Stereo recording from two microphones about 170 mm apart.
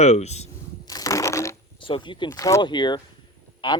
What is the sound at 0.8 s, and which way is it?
Crushing, 20° left (ahead or behind).